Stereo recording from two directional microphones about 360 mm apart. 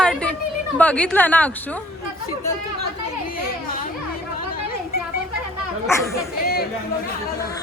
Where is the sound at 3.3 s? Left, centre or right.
Left.